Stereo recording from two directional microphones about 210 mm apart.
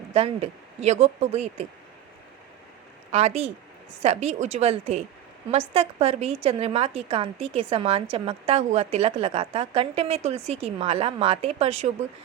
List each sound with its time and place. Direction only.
0.1 s speech: 30° right (ahead or behind)
3.1 s a woman's voice: 30° right (ahead or behind)